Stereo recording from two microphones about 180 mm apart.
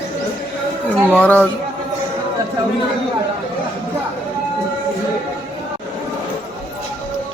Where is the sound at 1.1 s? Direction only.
5° left (ahead or behind).